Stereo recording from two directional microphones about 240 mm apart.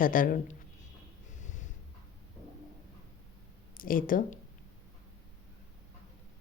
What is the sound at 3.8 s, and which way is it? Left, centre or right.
Speech, left.